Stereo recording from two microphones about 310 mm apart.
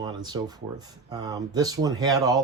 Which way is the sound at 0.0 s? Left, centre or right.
Centre.